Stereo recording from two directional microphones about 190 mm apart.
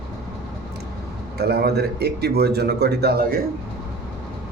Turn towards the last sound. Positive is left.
turn(degrees=-55)  # may be behind; listen again after turning